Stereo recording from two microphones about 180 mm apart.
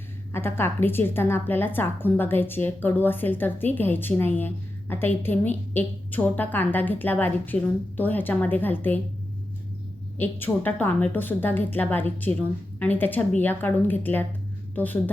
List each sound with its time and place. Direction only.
0.3 s a woman's voice: 10° left (ahead or behind)
10.2 s a woman's voice: 10° left (ahead or behind)